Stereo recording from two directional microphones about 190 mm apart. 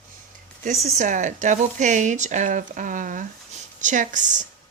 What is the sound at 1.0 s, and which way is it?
Speech, 40° right (ahead or behind).